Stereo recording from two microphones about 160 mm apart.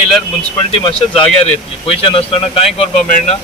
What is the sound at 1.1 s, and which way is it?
Speech, 35° left (ahead or behind).